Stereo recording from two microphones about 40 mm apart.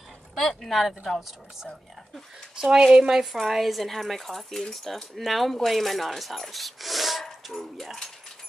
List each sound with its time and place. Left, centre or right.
0.6 s speech: centre
2.7 s speech: centre
3.3 s speech: centre